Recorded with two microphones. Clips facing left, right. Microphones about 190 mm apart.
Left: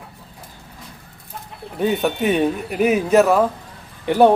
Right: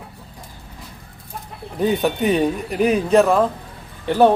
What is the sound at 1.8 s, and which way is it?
A man's voice, centre (ahead or behind).